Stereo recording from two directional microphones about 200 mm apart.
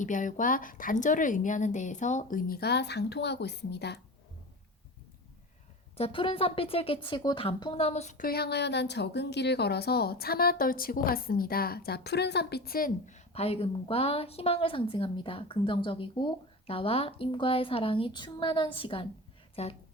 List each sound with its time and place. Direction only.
0.0 s a woman's voice: 40° left (ahead or behind); by 4.0 s 55° left (ahead or behind)
6.0 s speech: 25° left (ahead or behind)
8.3 s a woman's voice: 55° left (ahead or behind); by 19.7 s 30° left (ahead or behind)